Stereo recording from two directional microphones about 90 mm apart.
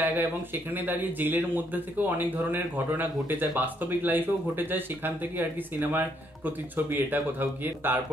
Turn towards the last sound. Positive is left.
turn(degrees=-20)  # may be behind; listen again after turning